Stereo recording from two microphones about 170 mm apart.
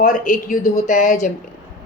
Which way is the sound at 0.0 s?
50° left (ahead or behind).